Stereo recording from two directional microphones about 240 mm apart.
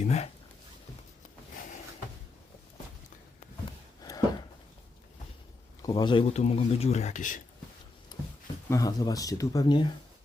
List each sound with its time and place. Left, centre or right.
0.0 s speech: left
4.0 s a sound: centre
5.8 s speech: centre
8.7 s speech: centre